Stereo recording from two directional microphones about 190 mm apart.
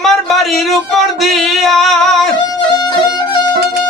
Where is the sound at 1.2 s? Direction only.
Centre (ahead or behind).